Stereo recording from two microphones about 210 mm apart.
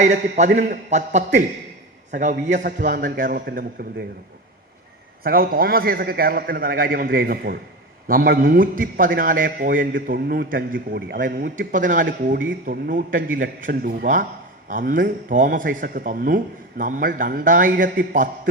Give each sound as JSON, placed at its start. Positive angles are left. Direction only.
{"t": 0.0, "sound": "a man's voice", "side_deg": -35}
{"t": 2.5, "sound": "a man's voice", "side_deg": -40}
{"t": 5.2, "sound": "a man's voice", "side_deg": -45}